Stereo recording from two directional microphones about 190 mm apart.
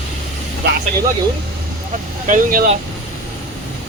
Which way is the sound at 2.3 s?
45° right (ahead or behind).